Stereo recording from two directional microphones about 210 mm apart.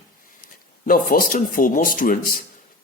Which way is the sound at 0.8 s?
40° left (ahead or behind).